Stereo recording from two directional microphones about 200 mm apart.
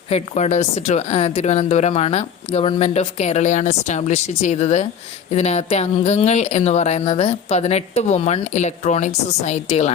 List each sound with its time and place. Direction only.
0.1 s a woman's voice: 35° left (ahead or behind)